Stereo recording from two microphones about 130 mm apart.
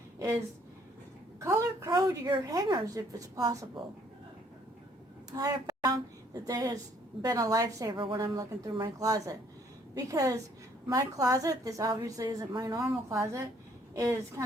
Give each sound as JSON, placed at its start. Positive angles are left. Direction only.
{"t": 1.5, "sound": "a woman's voice", "side_deg": -25}
{"t": 5.3, "sound": "a woman's voice", "side_deg": -30}
{"t": 8.1, "sound": "a woman's voice", "side_deg": -25}